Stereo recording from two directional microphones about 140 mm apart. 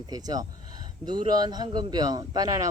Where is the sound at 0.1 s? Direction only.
25° right (ahead or behind).